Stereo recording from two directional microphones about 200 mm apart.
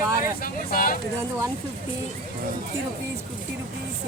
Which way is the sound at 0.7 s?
45° left (ahead or behind).